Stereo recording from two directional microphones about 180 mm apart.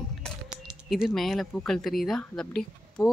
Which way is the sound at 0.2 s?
5° right (ahead or behind).